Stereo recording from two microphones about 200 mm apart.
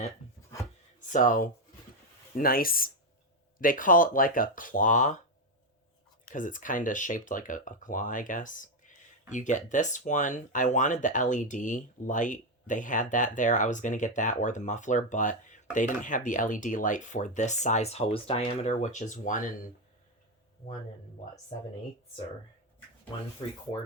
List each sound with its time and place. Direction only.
0.9 s speech: 40° left (ahead or behind)
6.2 s speech: 40° left (ahead or behind)